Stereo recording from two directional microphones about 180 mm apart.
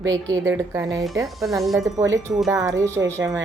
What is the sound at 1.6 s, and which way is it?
Speech, centre (ahead or behind).